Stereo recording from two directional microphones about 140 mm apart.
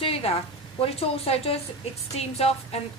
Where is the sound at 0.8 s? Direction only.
45° left (ahead or behind).